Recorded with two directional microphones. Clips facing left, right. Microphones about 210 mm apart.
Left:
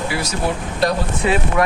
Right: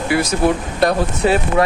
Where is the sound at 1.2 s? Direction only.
35° right (ahead or behind).